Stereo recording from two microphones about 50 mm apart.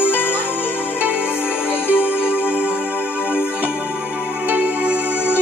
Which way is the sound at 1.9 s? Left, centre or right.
Right.